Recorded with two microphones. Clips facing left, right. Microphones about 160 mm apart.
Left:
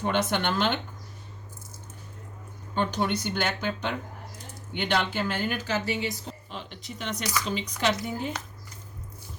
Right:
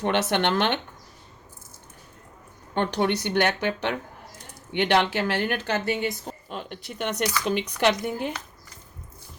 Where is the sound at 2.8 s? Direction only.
65° right (ahead or behind).